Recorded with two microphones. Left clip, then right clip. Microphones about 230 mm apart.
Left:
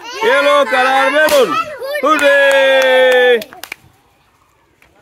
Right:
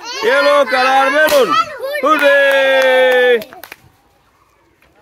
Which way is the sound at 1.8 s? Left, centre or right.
Centre.